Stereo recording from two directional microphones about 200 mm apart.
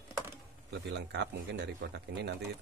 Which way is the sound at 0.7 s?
60° right (ahead or behind).